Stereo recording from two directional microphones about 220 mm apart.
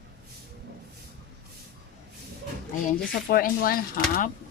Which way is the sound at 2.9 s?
40° left (ahead or behind).